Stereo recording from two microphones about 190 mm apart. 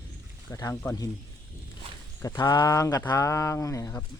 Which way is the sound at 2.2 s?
20° left (ahead or behind).